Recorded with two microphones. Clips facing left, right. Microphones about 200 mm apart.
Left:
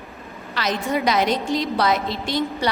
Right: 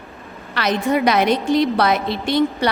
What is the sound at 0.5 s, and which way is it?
A woman's voice, 60° right (ahead or behind).